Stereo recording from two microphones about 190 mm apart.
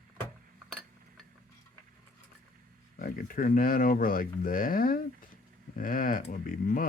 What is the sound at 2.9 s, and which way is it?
Speech, 50° left (ahead or behind).